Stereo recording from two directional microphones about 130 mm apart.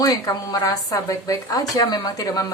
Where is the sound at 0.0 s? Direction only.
25° left (ahead or behind).